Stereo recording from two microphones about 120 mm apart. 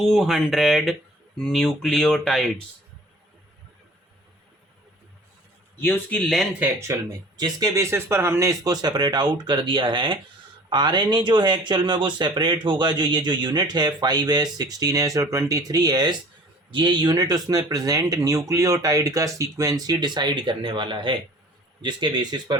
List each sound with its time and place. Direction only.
0.0 s speech: centre (ahead or behind)
5.8 s speech: 15° left (ahead or behind)
6.2 s speech: centre (ahead or behind)
6.6 s speech: 25° right (ahead or behind)
7.3 s speech: 35° right (ahead or behind)